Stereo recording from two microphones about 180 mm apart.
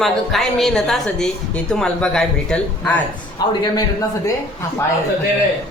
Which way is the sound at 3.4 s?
20° left (ahead or behind).